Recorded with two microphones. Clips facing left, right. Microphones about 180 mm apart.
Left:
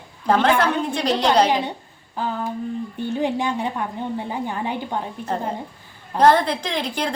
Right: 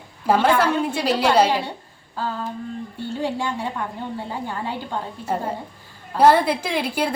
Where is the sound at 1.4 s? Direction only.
15° left (ahead or behind).